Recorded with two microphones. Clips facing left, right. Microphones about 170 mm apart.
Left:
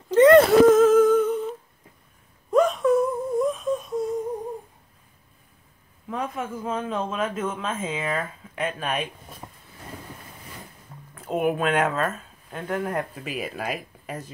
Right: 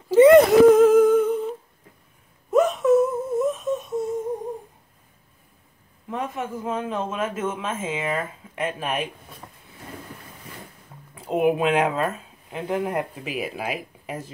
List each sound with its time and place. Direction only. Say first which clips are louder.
0.1 s a sound: right 2 dB; 10° right (ahead or behind)
2.5 s wail: right 2 dB; centre (ahead or behind)
6.0 s a man's voice: right 1 dB; centre (ahead or behind)
9.4 s vehicle: left 3 dB; 20° left (ahead or behind)
11.1 s speech: right 3 dB; 15° right (ahead or behind)